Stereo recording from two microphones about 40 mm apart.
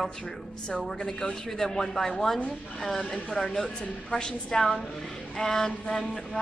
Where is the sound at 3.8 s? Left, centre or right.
Left.